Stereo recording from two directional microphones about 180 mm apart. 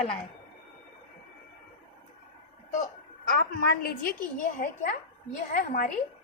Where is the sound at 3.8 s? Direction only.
55° left (ahead or behind).